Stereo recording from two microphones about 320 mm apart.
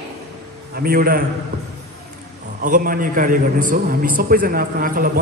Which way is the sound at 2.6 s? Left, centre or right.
Right.